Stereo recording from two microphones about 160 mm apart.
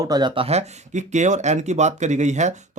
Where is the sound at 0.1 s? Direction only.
30° right (ahead or behind).